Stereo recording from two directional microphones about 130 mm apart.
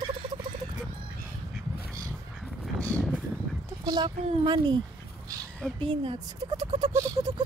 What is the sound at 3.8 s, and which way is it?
Speech, 35° right (ahead or behind).